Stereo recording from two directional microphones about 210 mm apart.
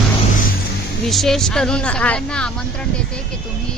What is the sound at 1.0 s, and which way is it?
A woman's voice, centre (ahead or behind).